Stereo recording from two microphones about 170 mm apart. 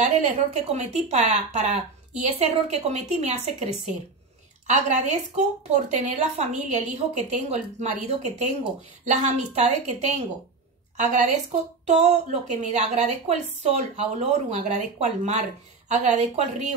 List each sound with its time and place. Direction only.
0.0 s a woman's voice: 40° right (ahead or behind)
4.6 s a woman's voice: 45° right (ahead or behind)